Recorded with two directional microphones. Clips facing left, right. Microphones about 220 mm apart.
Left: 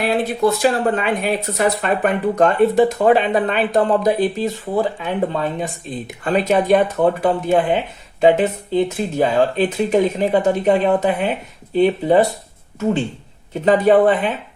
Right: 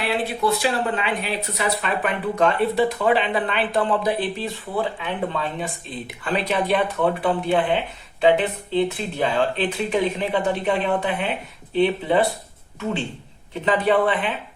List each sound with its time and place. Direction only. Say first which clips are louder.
0.0 s speech: left 6 dB; 45° left (ahead or behind)